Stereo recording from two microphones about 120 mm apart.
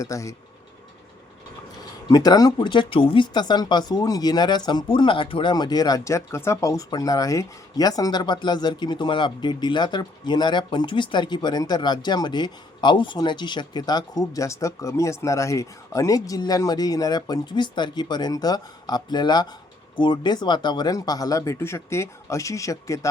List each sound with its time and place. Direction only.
0.0 s speech: 25° left (ahead or behind)
2.0 s speech: 35° left (ahead or behind)